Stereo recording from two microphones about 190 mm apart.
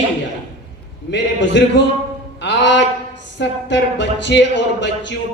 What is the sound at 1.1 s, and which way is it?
Speech, 70° left (ahead or behind).